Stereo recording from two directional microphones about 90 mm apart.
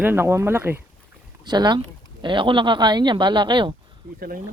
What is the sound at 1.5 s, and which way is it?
Speech, 55° right (ahead or behind).